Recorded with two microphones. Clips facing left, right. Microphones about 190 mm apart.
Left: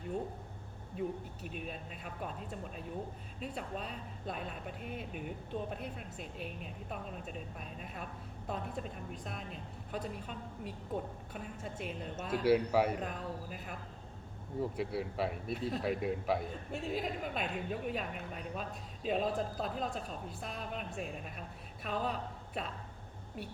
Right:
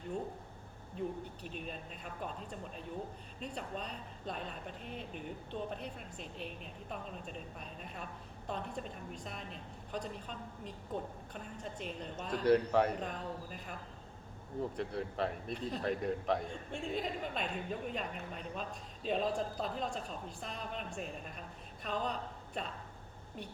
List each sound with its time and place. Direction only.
0.9 s speech: 5° left (ahead or behind)
14.8 s a man's voice: 5° left (ahead or behind)